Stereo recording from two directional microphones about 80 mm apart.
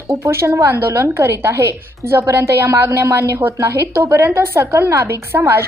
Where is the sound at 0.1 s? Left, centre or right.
Right.